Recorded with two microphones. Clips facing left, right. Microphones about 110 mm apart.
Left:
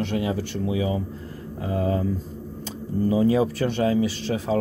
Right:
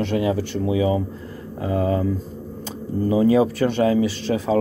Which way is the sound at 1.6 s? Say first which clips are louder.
Right 3 dB; 60° right (ahead or behind).